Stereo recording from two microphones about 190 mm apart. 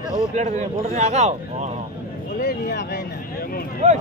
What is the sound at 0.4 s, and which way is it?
Speech, 35° right (ahead or behind).